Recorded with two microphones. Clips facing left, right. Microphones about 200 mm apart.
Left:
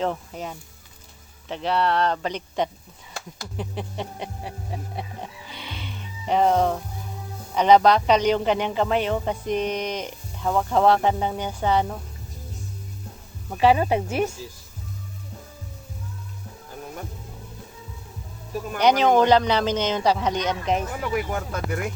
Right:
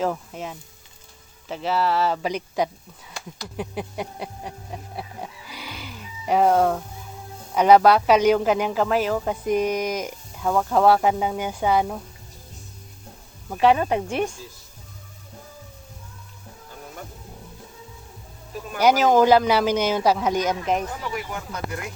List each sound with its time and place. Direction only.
0.0 s speech: centre (ahead or behind)
13.5 s speech: centre (ahead or behind)
18.8 s speech: 5° right (ahead or behind)
21.2 s speech: 50° left (ahead or behind)